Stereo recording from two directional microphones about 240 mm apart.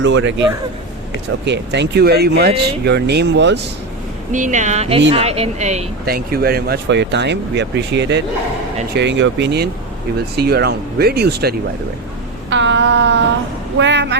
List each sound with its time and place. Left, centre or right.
0.0 s speech: right
1.5 s speech: right
4.3 s speech: right
12.5 s a sound: right
13.7 s speech: right